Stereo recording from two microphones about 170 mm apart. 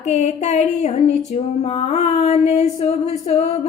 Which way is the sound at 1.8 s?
40° left (ahead or behind).